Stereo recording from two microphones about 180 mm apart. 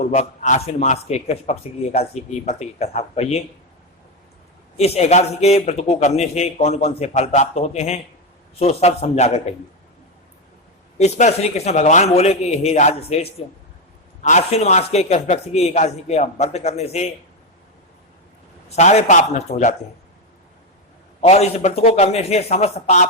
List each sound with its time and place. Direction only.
0.0 s a man's voice: 40° left (ahead or behind)
4.8 s a man's voice: 35° left (ahead or behind)
10.9 s a man's voice: 40° left (ahead or behind)
18.8 s a man's voice: 40° left (ahead or behind)
21.2 s a man's voice: 35° left (ahead or behind)